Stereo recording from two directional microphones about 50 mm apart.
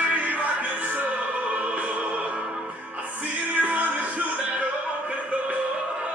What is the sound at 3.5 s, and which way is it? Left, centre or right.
Music, right.